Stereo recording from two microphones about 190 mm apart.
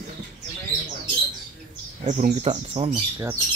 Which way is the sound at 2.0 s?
40° right (ahead or behind).